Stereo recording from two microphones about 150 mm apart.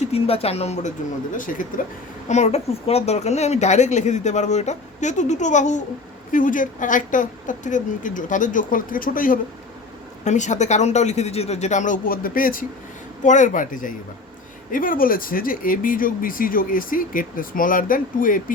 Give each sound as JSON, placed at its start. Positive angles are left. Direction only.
{"t": 0.0, "sound": "speech", "side_deg": 40}
{"t": 1.4, "sound": "a woman's voice", "side_deg": 60}
{"t": 2.2, "sound": "a woman's voice", "side_deg": 50}
{"t": 10.2, "sound": "speech", "side_deg": 50}
{"t": 13.2, "sound": "a woman's voice", "side_deg": 55}